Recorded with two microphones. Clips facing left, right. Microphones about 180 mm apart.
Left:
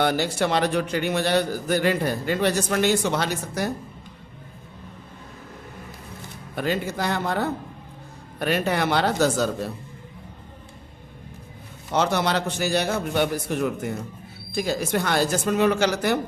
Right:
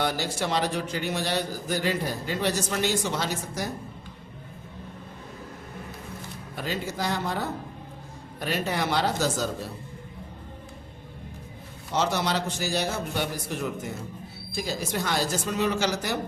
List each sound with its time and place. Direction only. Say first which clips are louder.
0.0 s a man's voice: left 5 dB; 60° left (ahead or behind)
6.6 s a man's voice: left 5 dB; 60° left (ahead or behind)
11.9 s a man's voice: left 4 dB; 60° left (ahead or behind)